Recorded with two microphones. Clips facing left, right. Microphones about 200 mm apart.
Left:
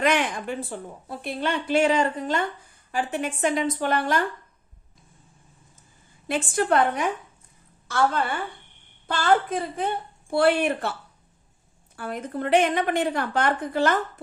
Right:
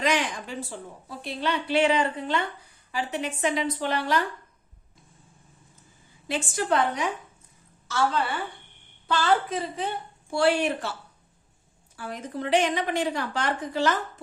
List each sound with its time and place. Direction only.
0.0 s a woman's voice: 55° left (ahead or behind)
6.2 s a woman's voice: 55° left (ahead or behind)
11.9 s a woman's voice: 55° left (ahead or behind)